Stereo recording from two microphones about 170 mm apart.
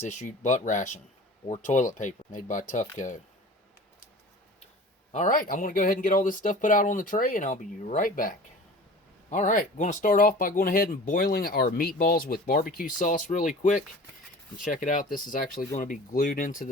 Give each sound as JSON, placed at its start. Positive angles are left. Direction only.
{"t": 0.0, "sound": "speech", "side_deg": 45}
{"t": 5.1, "sound": "speech", "side_deg": 50}